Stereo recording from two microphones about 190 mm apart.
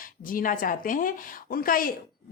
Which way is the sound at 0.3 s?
45° left (ahead or behind).